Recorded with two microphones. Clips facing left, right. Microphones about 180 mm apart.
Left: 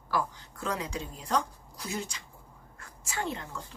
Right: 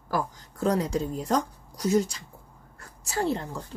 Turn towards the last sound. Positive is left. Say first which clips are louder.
# right 7 dB
turn(degrees=-35)  # may be behind; listen again after turning